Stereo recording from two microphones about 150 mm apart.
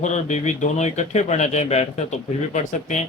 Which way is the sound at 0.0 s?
50° left (ahead or behind).